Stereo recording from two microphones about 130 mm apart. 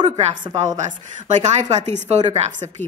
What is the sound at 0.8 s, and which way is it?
Speech, 70° right (ahead or behind).